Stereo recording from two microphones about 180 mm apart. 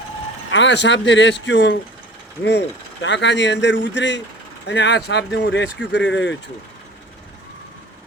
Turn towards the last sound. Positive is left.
turn(degrees=90)